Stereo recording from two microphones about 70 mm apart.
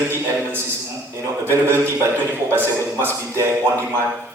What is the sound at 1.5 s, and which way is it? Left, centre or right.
Speech, right.